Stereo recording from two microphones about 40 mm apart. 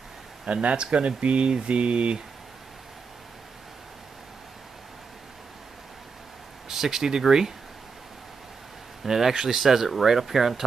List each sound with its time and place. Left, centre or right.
0.5 s speech: right
6.7 s speech: centre
9.0 s speech: centre